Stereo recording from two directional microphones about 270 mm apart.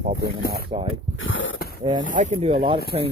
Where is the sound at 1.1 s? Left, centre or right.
Left.